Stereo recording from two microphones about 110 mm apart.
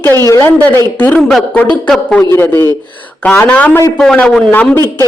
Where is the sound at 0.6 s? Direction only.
15° left (ahead or behind).